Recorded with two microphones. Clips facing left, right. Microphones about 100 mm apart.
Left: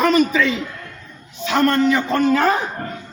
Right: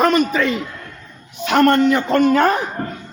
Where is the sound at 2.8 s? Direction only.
25° right (ahead or behind).